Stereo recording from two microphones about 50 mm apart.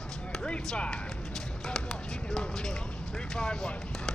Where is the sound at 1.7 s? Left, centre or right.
Centre.